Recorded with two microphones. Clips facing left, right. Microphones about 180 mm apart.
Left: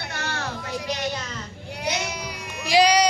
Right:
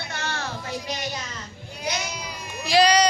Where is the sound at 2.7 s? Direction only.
15° left (ahead or behind).